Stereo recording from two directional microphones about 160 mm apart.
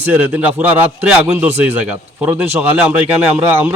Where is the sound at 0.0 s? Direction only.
10° right (ahead or behind).